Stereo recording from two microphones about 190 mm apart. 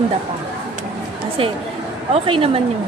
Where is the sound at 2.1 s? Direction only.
30° right (ahead or behind).